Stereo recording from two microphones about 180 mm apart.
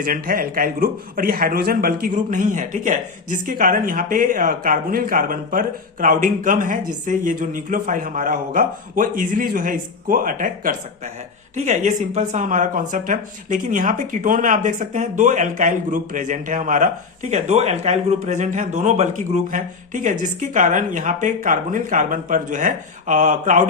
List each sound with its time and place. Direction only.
0.0 s speech: 50° right (ahead or behind)